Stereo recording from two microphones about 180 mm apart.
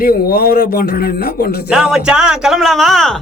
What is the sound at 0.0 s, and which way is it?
Speech, 55° left (ahead or behind).